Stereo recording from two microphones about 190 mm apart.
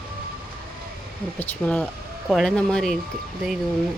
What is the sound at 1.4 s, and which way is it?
Speech, 10° left (ahead or behind).